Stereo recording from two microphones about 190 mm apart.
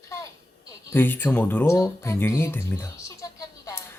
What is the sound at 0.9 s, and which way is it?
Speech, 10° left (ahead or behind).